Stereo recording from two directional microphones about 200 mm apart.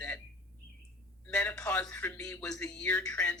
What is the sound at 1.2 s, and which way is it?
A woman's voice, 10° left (ahead or behind).